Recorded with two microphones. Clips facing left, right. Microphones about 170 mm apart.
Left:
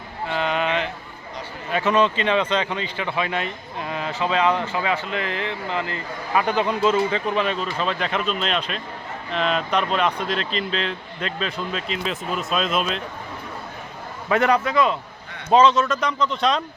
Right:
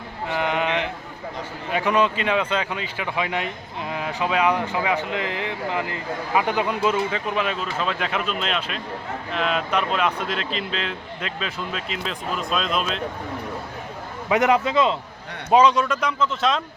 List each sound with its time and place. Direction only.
0.3 s mantra: 20° right (ahead or behind)
1.7 s speech: 15° right (ahead or behind)
14.3 s a man's voice: 20° right (ahead or behind); by 16.6 s centre (ahead or behind)